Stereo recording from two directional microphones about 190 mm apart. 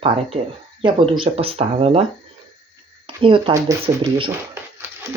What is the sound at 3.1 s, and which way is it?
Speech, 30° right (ahead or behind).